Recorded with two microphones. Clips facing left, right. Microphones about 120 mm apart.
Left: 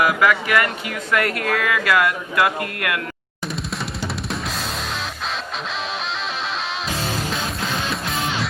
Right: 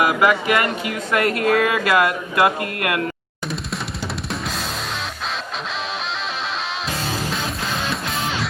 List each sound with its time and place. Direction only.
0.0 s speech: 25° right (ahead or behind)